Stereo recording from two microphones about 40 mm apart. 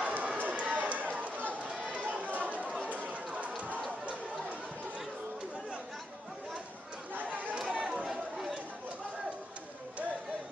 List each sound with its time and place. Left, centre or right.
0.0 s run: right
1.9 s chatter: right
3.3 s a sound: right
7.2 s chatter: right
7.6 s chatter: right
8.1 s chatter: centre